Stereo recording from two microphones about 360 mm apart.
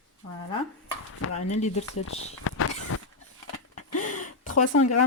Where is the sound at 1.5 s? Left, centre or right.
Centre.